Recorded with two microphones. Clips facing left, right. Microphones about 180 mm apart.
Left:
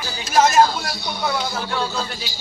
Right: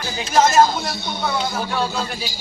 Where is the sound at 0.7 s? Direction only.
20° right (ahead or behind).